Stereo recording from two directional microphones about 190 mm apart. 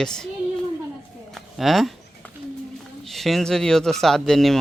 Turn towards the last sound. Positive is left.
turn(degrees=0)  # may be behind; listen again after turning